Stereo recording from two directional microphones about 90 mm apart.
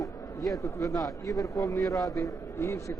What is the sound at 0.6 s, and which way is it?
Speech, 35° left (ahead or behind).